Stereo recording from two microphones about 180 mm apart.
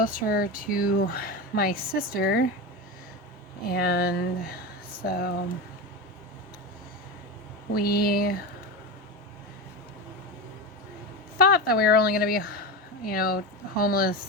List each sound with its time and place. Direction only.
0.0 s speech: 55° left (ahead or behind)
3.7 s speech: 60° left (ahead or behind)
7.7 s speech: 55° left (ahead or behind)
11.3 s speech: 60° left (ahead or behind)